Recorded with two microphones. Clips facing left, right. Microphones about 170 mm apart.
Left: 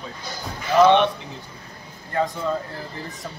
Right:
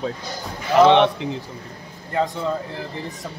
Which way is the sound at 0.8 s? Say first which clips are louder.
Right 2 dB; 85° right.